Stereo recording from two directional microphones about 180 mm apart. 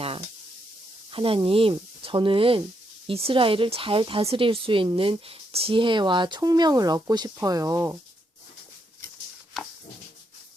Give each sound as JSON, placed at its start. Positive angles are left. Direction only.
{"t": 1.1, "sound": "a woman's voice", "side_deg": -30}